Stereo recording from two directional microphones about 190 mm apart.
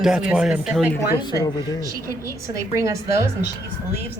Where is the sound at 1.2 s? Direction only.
20° left (ahead or behind).